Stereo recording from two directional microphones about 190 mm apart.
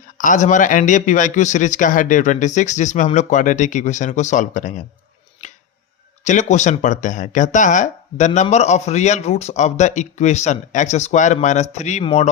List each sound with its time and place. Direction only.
0.2 s speech: 40° left (ahead or behind)
6.2 s speech: 40° left (ahead or behind)